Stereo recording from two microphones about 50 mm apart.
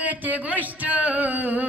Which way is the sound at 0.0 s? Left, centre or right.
Right.